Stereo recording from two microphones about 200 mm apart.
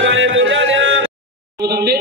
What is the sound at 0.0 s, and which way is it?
Music, 70° right (ahead or behind).